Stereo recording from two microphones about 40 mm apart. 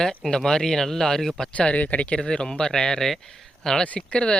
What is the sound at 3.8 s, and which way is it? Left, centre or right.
Speech, left.